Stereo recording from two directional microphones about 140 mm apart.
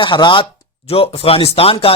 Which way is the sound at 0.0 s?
35° left (ahead or behind).